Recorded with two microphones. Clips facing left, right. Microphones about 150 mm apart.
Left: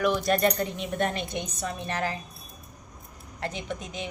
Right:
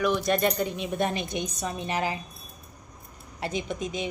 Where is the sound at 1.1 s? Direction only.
15° right (ahead or behind).